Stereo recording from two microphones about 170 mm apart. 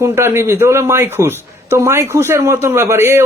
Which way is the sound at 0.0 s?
15° right (ahead or behind).